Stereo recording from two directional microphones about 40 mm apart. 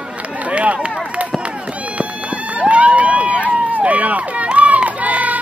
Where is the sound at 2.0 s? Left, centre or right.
Right.